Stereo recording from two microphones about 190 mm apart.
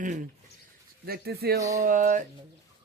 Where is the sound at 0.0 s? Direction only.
45° right (ahead or behind).